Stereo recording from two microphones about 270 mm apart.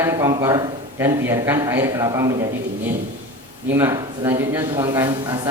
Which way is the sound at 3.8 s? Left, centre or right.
Centre.